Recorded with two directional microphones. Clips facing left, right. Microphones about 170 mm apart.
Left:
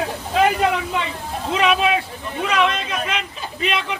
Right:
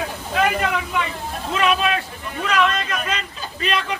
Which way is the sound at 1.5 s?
15° left (ahead or behind).